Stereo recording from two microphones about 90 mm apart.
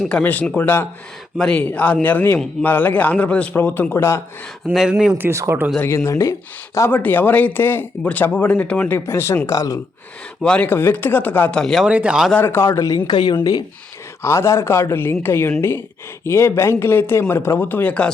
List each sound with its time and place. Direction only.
0.2 s speech: 20° left (ahead or behind)
1.4 s a man's voice: 10° left (ahead or behind); by 4.2 s 30° left (ahead or behind)
4.7 s speech: 5° right (ahead or behind)
5.1 s speech: 20° right (ahead or behind)
5.8 s speech: 25° left (ahead or behind)
6.9 s speech: 20° left (ahead or behind)
9.0 s speech: 30° left (ahead or behind)
10.4 s a man's voice: 10° left (ahead or behind)
10.7 s speech: 20° left (ahead or behind)
11.6 s speech: 5° left (ahead or behind)
11.9 s speech: 15° right (ahead or behind)
12.4 s speech: 25° left (ahead or behind)
13.1 s speech: 55° left (ahead or behind)
14.2 s speech: 30° left (ahead or behind); by 18.1 s 15° left (ahead or behind)